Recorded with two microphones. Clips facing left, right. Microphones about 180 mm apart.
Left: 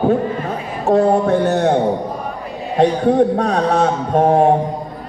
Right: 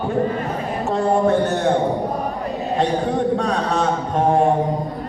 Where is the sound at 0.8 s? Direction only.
60° left (ahead or behind).